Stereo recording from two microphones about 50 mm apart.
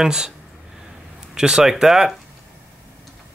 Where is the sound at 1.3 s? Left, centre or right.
Centre.